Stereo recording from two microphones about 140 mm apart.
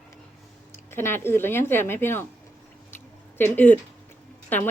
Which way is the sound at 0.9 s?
15° left (ahead or behind).